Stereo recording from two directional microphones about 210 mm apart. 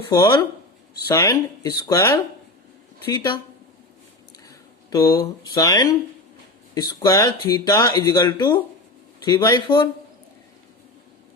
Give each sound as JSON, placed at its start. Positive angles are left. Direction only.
{"t": 0.1, "sound": "speech", "side_deg": 15}
{"t": 4.4, "sound": "a sound", "side_deg": 15}
{"t": 5.5, "sound": "speech", "side_deg": 15}